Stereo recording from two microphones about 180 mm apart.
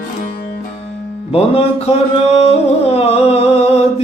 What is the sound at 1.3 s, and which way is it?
Music, 35° left (ahead or behind).